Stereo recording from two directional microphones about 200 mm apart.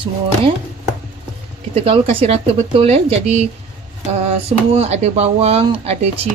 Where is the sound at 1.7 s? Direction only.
30° right (ahead or behind).